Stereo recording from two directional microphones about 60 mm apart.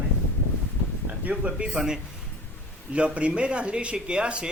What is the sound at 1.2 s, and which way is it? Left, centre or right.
Speech, right.